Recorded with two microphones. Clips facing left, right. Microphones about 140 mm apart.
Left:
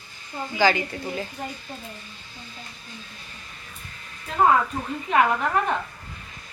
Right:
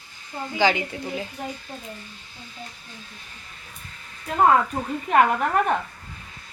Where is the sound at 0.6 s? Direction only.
20° right (ahead or behind).